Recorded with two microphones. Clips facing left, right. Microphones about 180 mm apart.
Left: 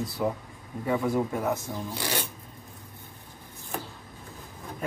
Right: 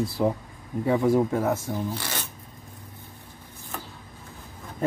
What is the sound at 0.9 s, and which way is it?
Speech, 20° right (ahead or behind).